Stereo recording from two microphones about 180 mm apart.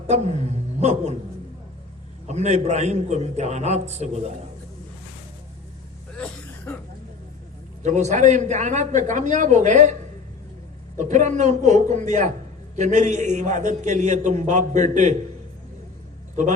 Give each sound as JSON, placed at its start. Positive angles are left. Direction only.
{"t": 0.1, "sound": "speech", "side_deg": -35}
{"t": 2.2, "sound": "a man's voice", "side_deg": -40}
{"t": 7.8, "sound": "a man's voice", "side_deg": -40}
{"t": 10.9, "sound": "a man's voice", "side_deg": -45}
{"t": 16.3, "sound": "speech", "side_deg": -45}